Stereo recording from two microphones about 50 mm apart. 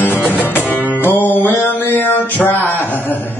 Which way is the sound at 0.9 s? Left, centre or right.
Left.